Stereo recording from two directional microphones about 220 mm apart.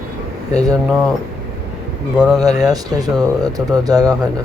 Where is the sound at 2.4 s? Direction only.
15° right (ahead or behind).